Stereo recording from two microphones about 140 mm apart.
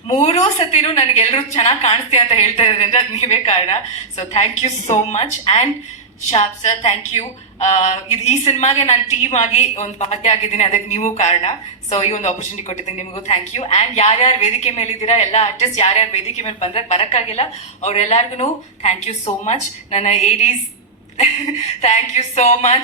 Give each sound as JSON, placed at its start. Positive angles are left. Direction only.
{"t": 0.1, "sound": "a woman's voice", "side_deg": 55}
{"t": 6.3, "sound": "a woman's voice", "side_deg": 50}
{"t": 21.8, "sound": "a woman's voice", "side_deg": 55}